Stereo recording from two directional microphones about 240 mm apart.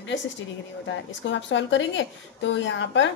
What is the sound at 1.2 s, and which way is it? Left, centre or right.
A woman's voice, left.